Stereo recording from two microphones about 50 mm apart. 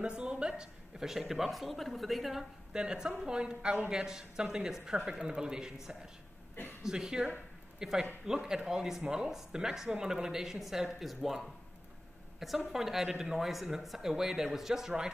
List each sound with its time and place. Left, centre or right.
0.0 s a sound: centre
0.9 s speech: centre
2.7 s a woman's voice: centre